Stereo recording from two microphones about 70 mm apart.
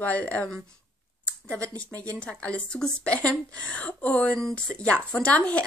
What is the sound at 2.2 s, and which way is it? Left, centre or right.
A woman's voice, centre.